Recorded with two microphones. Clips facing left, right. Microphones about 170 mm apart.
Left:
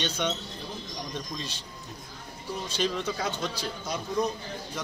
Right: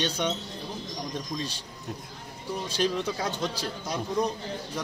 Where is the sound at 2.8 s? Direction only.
10° right (ahead or behind).